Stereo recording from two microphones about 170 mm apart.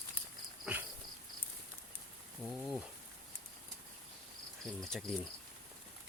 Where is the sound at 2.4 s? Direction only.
Centre (ahead or behind).